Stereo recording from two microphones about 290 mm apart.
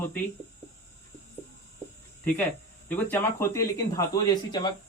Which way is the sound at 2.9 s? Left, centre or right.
Centre.